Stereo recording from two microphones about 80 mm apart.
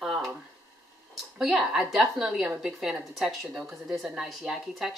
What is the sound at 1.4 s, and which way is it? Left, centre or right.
A woman's voice, centre.